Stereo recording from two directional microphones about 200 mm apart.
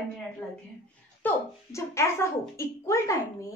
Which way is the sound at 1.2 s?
15° left (ahead or behind).